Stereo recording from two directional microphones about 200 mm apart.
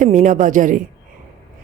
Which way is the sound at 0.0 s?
40° right (ahead or behind).